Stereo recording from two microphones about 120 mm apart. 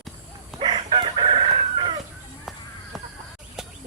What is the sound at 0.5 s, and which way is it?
Chicken, centre (ahead or behind).